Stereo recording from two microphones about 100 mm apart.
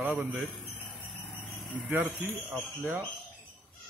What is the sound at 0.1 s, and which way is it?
Speech, 15° right (ahead or behind).